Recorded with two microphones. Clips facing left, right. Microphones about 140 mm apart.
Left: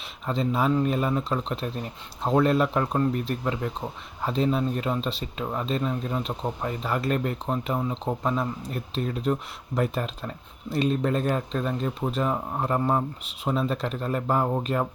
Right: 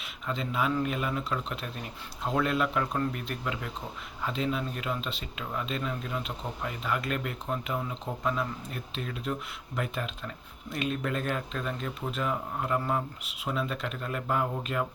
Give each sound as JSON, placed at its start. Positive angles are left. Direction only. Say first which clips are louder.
{"t": 0.3, "sound": "speech", "louder": "left 6 dB", "side_deg": 35}